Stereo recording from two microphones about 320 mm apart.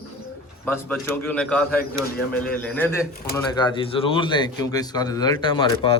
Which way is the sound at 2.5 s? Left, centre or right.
Centre.